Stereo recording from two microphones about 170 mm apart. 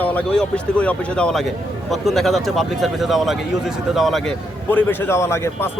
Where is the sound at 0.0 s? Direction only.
10° left (ahead or behind).